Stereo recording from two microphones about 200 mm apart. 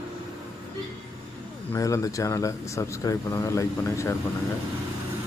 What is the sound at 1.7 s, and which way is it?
Speech, 15° left (ahead or behind).